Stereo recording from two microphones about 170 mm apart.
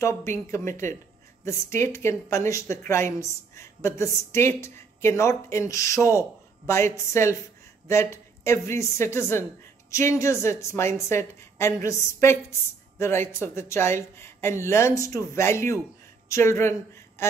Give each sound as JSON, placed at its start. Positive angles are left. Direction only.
{"t": 0.0, "sound": "a woman's voice", "side_deg": 15}